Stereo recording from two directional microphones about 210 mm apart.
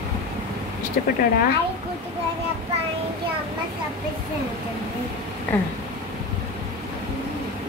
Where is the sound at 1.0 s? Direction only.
40° left (ahead or behind).